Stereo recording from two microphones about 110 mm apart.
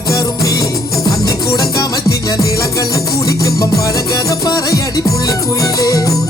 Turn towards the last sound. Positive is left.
turn(degrees=35)  # may be behind; listen again after turning